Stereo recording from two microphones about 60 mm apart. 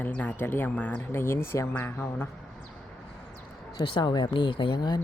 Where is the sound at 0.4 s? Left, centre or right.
Left.